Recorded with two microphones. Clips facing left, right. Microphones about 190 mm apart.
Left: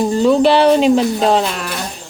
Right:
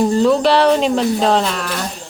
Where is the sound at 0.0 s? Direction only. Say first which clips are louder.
Left 1 dB; 5° left (ahead or behind).